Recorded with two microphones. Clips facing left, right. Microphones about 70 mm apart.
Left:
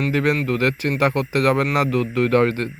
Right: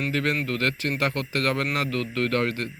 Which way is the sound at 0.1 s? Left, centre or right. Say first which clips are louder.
Left 6 dB; left.